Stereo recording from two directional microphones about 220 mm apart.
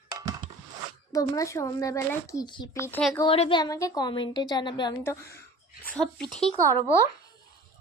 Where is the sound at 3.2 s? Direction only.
25° left (ahead or behind); by 6.5 s 5° left (ahead or behind).